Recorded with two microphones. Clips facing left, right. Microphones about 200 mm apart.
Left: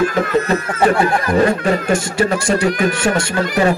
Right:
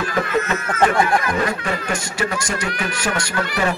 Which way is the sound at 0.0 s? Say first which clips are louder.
Left 5 dB; 45° left (ahead or behind).